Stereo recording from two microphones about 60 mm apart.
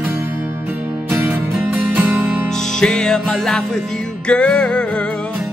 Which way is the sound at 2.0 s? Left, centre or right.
Right.